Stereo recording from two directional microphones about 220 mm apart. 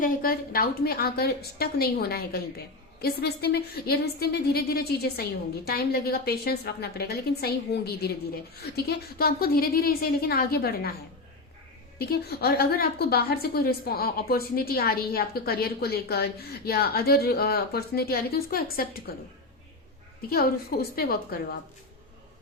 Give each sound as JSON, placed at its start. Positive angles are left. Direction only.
{"t": 0.0, "sound": "a woman's voice", "side_deg": 40}
{"t": 11.9, "sound": "a woman's voice", "side_deg": 45}
{"t": 20.3, "sound": "a woman's voice", "side_deg": 45}